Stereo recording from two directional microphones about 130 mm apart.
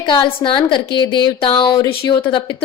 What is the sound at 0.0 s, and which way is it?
A woman's voice, 35° left (ahead or behind).